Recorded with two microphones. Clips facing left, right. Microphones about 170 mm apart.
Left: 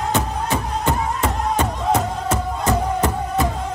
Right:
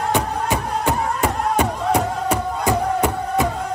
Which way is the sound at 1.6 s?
15° right (ahead or behind).